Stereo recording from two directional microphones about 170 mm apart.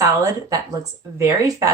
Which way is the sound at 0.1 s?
20° right (ahead or behind).